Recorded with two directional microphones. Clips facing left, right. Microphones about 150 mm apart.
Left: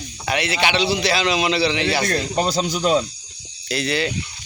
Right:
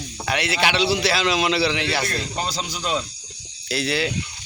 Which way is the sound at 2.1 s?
50° left (ahead or behind).